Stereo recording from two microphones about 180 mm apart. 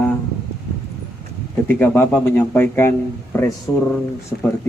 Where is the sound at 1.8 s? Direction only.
10° left (ahead or behind).